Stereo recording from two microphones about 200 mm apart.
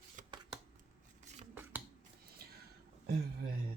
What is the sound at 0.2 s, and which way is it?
Shuffling cards, 40° right (ahead or behind).